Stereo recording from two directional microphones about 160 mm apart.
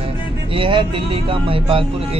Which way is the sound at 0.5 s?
30° right (ahead or behind).